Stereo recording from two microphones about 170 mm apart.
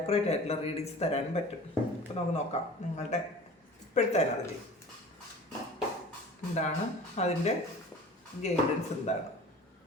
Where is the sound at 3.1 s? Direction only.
40° left (ahead or behind).